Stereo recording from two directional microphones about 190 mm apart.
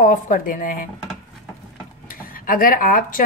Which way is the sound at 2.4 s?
45° left (ahead or behind).